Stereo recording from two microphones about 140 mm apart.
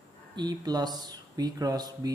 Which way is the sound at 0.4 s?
30° right (ahead or behind).